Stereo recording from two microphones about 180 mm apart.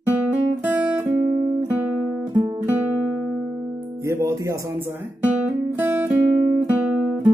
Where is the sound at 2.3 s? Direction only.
20° right (ahead or behind).